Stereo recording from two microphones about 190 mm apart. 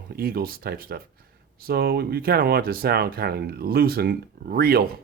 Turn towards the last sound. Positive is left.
turn(degrees=-55)  # may be behind; listen again after turning